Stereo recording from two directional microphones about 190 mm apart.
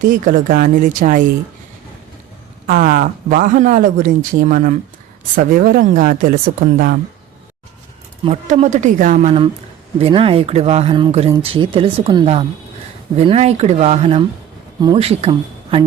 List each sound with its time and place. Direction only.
0.0 s speech: 45° right (ahead or behind)
2.6 s speech: 45° right (ahead or behind)
8.2 s speech: 35° right (ahead or behind)